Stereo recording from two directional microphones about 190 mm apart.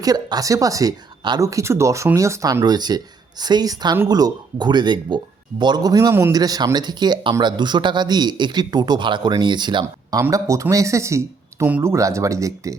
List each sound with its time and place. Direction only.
0.0 s speech: 20° right (ahead or behind)